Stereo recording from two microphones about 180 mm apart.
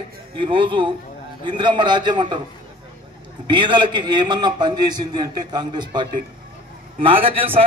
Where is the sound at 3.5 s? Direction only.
25° right (ahead or behind).